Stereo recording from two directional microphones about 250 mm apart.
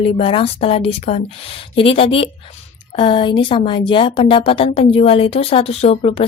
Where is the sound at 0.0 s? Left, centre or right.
Left.